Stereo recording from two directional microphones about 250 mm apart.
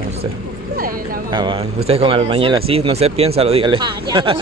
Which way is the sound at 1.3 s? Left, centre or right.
Centre.